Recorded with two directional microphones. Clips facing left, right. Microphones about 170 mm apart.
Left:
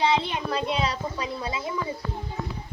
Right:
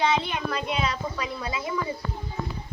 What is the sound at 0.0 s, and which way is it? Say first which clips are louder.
A child's voice: left 1 dB; 30° left (ahead or behind).